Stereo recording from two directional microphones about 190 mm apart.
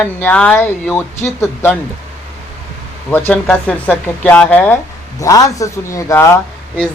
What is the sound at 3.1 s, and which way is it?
Speech, 10° left (ahead or behind).